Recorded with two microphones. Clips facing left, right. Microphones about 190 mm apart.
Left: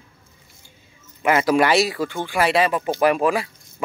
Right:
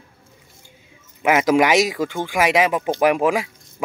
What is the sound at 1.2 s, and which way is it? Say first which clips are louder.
Speech: right 1 dB; 15° right (ahead or behind).